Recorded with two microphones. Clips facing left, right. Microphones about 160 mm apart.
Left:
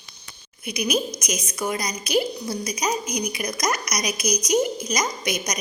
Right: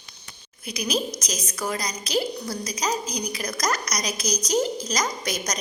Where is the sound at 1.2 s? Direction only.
20° left (ahead or behind).